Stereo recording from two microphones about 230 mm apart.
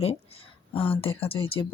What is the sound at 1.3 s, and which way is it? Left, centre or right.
Speech, left.